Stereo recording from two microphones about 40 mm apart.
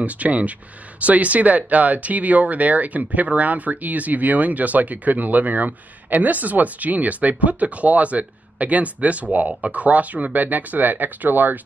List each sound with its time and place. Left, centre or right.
0.0 s speech: right